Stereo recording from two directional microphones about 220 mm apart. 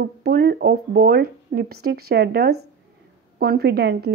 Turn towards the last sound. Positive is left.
turn(degrees=-45)  # may be behind; listen again after turning